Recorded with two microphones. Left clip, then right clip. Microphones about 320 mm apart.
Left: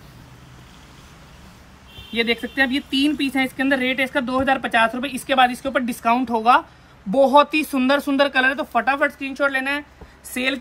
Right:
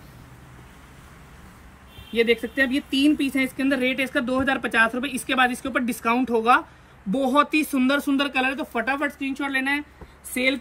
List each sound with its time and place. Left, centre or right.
2.1 s speech: left